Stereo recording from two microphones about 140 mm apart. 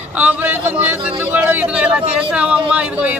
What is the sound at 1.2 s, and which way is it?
Speech, 15° right (ahead or behind).